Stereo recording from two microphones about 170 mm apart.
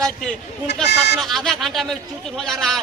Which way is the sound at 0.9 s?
85° left.